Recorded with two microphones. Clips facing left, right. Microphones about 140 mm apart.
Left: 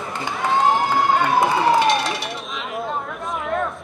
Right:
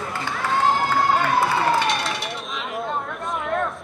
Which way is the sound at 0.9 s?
20° left (ahead or behind).